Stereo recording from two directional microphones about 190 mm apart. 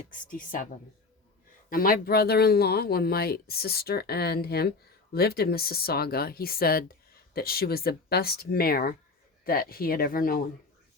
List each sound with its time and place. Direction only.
0.1 s speech: 45° left (ahead or behind)
1.7 s speech: 50° left (ahead or behind)